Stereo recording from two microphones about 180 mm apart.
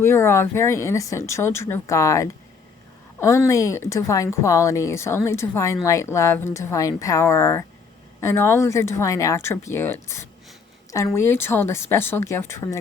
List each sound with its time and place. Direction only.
0.0 s speech: 15° left (ahead or behind)